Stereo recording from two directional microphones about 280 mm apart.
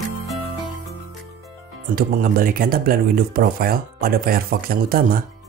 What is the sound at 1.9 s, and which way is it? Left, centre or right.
Speech, right.